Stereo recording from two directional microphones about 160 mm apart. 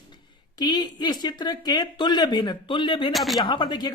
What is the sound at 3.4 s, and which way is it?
Speech, 30° left (ahead or behind).